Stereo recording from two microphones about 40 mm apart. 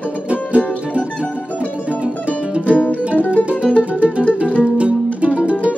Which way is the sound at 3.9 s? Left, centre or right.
Right.